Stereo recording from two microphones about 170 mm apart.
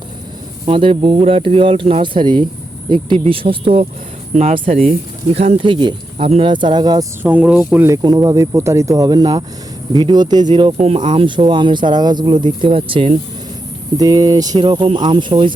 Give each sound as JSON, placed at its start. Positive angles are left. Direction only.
{"t": 0.6, "sound": "speech", "side_deg": -30}
{"t": 4.4, "sound": "speech", "side_deg": -45}
{"t": 5.3, "sound": "speech", "side_deg": -35}
{"t": 7.2, "sound": "speech", "side_deg": -10}